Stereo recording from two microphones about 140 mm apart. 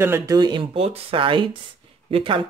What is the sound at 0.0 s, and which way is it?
Speech, 15° right (ahead or behind).